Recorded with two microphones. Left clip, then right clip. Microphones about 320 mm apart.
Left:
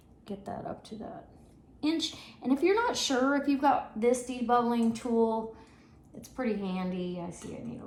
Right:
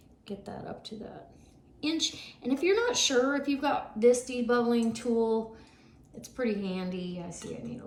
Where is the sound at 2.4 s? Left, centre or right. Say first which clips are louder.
Even; centre.